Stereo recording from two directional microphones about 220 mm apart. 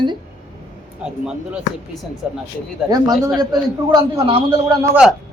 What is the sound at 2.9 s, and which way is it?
A man's voice, 15° right (ahead or behind).